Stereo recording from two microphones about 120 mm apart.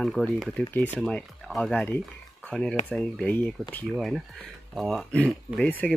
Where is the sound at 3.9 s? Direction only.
Centre (ahead or behind).